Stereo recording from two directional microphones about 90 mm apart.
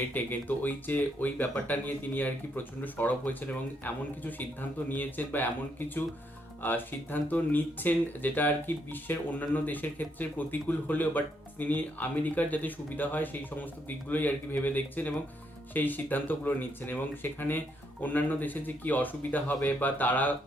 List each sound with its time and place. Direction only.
0.1 s speech: 20° left (ahead or behind)
6.6 s speech: 20° left (ahead or behind)